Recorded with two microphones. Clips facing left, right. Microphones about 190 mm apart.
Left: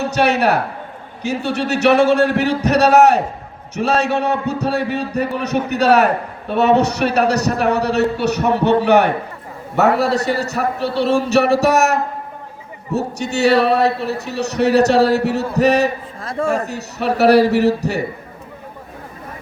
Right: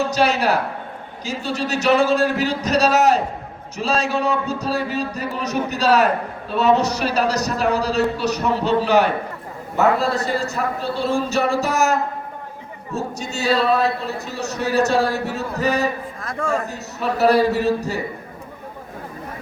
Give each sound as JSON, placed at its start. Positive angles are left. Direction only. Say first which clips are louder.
{"t": 0.0, "sound": "a man's voice", "louder": "left 3 dB", "side_deg": 65}
{"t": 16.2, "sound": "a man's voice", "louder": "left 6 dB", "side_deg": 30}
{"t": 16.5, "sound": "a man's voice", "louder": "left 1 dB", "side_deg": 70}